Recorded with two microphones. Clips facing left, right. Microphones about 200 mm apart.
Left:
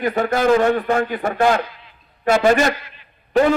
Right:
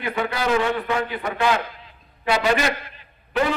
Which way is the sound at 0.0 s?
45° left (ahead or behind).